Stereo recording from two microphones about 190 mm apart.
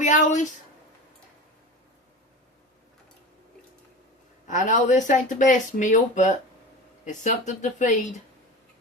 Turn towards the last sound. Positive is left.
turn(degrees=40)  # may be behind; listen again after turning